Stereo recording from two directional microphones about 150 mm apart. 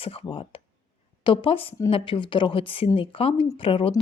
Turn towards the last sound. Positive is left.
turn(degrees=35)  # may be behind; listen again after turning